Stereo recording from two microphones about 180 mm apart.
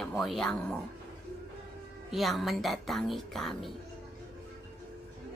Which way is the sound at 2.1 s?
Centre (ahead or behind).